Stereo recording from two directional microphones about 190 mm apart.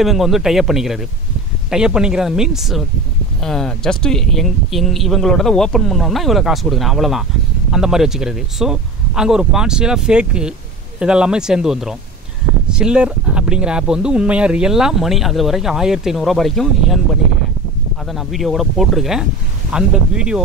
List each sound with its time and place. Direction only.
0.0 s speech: centre (ahead or behind)
18.1 s speech: centre (ahead or behind)